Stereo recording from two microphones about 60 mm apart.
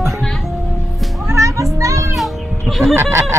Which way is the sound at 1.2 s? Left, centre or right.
Right.